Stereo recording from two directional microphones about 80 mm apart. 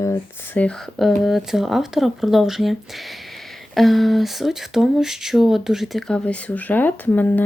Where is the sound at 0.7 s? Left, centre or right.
Centre.